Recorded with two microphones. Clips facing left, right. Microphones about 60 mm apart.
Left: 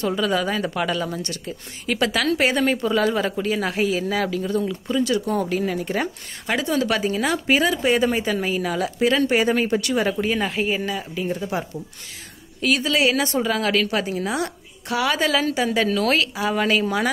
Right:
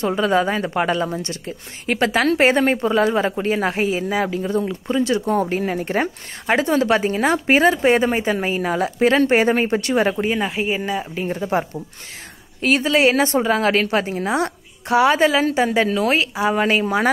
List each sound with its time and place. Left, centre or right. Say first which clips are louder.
0.0 s a woman's voice: right 4 dB; right
10.4 s a woman's voice: right 1 dB; centre